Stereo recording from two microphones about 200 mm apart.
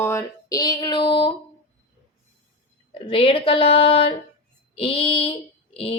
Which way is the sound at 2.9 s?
25° left (ahead or behind).